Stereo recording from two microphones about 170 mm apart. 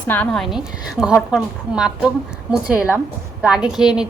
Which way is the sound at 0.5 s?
5° right (ahead or behind).